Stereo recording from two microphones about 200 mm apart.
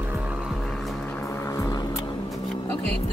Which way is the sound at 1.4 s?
15° left (ahead or behind).